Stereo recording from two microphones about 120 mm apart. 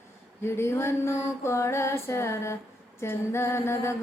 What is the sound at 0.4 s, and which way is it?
Mantra, 20° left (ahead or behind).